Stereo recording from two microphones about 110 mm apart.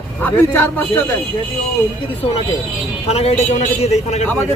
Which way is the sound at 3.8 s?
80° left.